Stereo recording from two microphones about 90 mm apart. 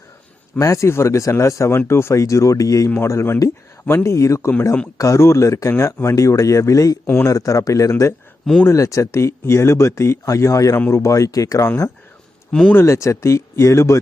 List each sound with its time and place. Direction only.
0.6 s speech: 35° left (ahead or behind)
12.5 s speech: 10° left (ahead or behind)
12.7 s speech: 30° left (ahead or behind)